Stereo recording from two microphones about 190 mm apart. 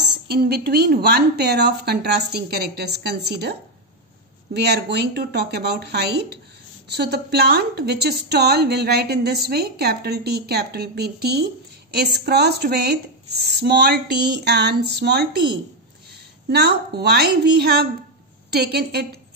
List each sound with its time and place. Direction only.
0.3 s a woman's voice: 55° right (ahead or behind)
4.6 s a woman's voice: 60° right (ahead or behind)
16.4 s a woman's voice: 60° right (ahead or behind)